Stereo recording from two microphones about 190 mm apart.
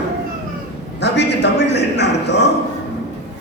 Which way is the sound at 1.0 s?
65° left (ahead or behind).